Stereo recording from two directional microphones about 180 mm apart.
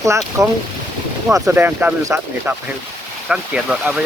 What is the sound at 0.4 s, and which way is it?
Speech, 15° right (ahead or behind).